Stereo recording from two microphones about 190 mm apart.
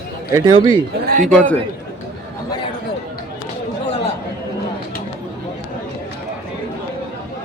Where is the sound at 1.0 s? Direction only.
50° right (ahead or behind).